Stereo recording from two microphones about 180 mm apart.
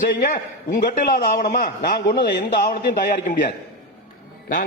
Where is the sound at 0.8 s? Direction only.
65° left (ahead or behind).